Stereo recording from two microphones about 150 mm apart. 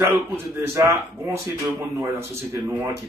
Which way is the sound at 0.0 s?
15° right (ahead or behind).